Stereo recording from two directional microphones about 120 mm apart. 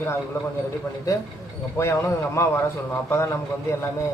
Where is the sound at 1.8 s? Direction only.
15° left (ahead or behind).